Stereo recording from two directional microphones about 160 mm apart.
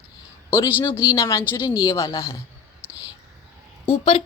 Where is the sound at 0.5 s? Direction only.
20° left (ahead or behind).